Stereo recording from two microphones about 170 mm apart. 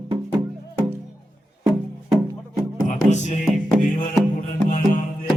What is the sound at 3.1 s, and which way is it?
Music, 45° left (ahead or behind).